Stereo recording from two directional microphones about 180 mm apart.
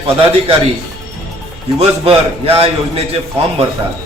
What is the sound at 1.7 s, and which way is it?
A man's voice, 30° right (ahead or behind).